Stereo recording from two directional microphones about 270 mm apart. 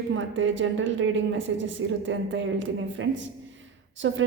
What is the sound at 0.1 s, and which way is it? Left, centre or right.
A woman's voice, right.